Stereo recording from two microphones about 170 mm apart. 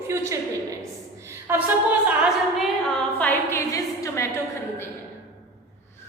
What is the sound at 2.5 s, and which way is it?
A woman's voice, centre (ahead or behind).